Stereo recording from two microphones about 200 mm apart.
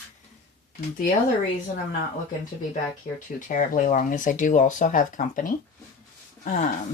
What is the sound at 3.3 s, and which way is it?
Speech, 40° left (ahead or behind).